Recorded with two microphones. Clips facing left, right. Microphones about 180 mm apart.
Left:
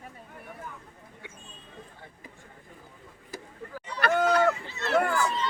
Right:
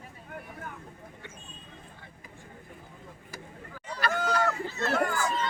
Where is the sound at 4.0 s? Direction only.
60° left (ahead or behind).